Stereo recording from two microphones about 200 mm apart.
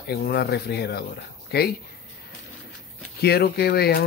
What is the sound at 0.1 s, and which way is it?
Speech, 55° left (ahead or behind).